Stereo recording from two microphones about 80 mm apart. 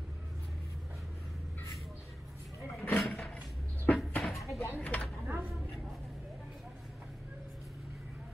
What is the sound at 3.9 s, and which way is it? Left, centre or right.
Cupboard open or close, centre.